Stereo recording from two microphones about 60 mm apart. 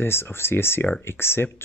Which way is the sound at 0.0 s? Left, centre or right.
Left.